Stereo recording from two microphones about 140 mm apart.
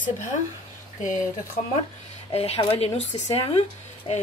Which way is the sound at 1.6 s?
60° left (ahead or behind).